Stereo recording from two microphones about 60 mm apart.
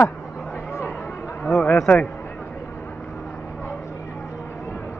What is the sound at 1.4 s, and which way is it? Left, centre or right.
Speech, centre.